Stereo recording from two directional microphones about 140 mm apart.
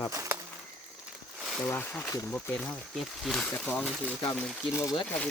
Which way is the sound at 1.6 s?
15° left (ahead or behind).